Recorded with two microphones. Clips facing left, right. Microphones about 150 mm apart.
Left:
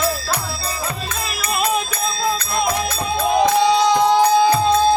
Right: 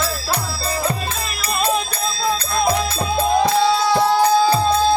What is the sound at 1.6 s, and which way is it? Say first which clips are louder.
Music: right 2 dB; 30° right (ahead or behind).